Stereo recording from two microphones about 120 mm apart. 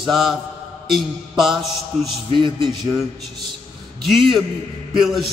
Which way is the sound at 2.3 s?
45° right (ahead or behind).